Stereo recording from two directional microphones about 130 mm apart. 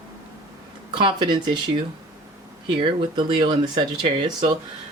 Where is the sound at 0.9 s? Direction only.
40° right (ahead or behind).